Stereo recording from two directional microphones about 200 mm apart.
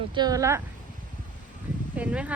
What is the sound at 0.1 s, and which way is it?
Speech, 20° right (ahead or behind).